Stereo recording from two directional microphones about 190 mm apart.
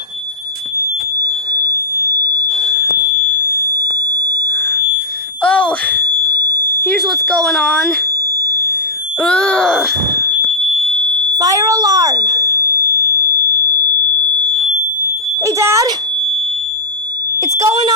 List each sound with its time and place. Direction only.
1.2 s smoke detector: 20° right (ahead or behind)
4.4 s smoke detector: 5° left (ahead or behind)
5.4 s a sound: 5° left (ahead or behind)
6.7 s speech: centre (ahead or behind)
9.2 s groan: 5° left (ahead or behind)
10.8 s smoke detector: 25° right (ahead or behind)
14.3 s smoke detector: 25° right (ahead or behind)
17.4 s smoke detector: 15° right (ahead or behind)